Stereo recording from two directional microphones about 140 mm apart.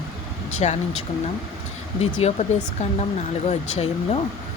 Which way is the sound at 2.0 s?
50° left (ahead or behind).